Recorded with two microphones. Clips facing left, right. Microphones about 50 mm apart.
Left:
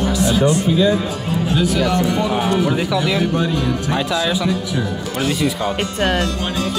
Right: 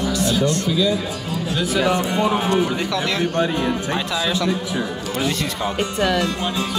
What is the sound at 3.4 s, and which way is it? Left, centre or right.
Speech, right.